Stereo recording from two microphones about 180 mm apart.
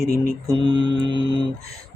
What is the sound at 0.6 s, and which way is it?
Music, 25° right (ahead or behind).